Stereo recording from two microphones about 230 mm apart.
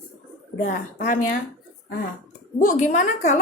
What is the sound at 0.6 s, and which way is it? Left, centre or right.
Speech, left.